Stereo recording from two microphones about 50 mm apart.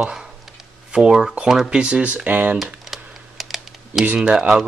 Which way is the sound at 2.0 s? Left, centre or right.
Right.